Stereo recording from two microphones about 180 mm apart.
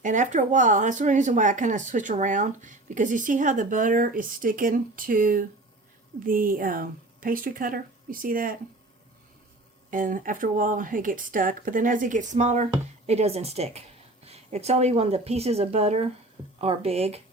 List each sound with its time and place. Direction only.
0.0 s speech: 45° right (ahead or behind)
9.9 s speech: 45° right (ahead or behind)